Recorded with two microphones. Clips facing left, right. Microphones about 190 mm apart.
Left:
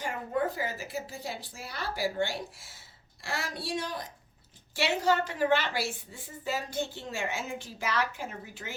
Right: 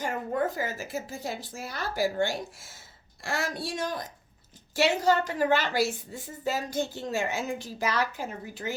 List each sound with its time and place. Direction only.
0.0 s a woman's voice: 45° right (ahead or behind)